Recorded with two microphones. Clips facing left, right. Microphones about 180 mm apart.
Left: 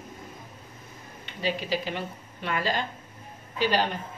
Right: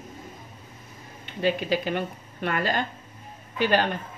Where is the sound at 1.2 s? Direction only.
55° right (ahead or behind).